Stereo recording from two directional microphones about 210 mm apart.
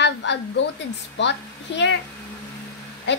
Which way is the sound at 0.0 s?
55° left (ahead or behind).